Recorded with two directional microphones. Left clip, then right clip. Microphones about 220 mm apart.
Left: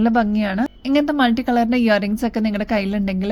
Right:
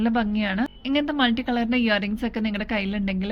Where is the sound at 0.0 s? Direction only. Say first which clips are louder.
Left 6 dB; 40° left (ahead or behind).